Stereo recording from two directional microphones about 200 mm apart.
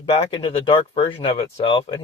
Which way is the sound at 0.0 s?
25° left (ahead or behind).